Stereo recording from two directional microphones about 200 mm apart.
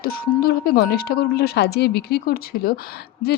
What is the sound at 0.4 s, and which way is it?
Speech, 50° left (ahead or behind).